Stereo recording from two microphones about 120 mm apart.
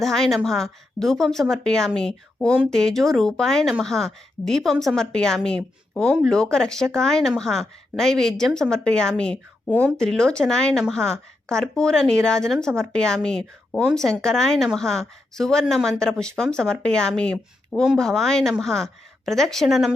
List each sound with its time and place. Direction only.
0.0 s a woman's voice: centre (ahead or behind)